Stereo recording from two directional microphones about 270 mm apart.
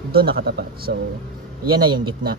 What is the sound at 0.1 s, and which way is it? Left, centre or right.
Speech, right.